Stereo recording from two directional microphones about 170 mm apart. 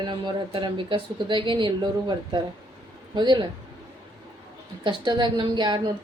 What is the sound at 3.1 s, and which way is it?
Speech, 25° right (ahead or behind).